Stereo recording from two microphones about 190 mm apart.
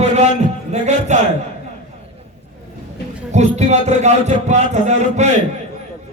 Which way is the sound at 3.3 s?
35° right (ahead or behind).